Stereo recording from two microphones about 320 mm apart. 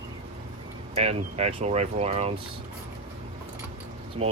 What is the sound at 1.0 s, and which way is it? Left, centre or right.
Speech, centre.